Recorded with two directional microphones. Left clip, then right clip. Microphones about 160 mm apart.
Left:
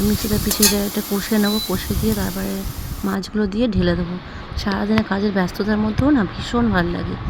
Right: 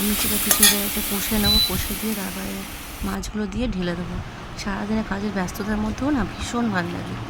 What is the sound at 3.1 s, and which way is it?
Speech, 20° left (ahead or behind).